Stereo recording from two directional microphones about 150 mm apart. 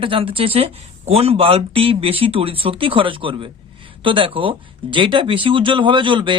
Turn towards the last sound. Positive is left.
turn(degrees=-30)  # may be behind; listen again after turning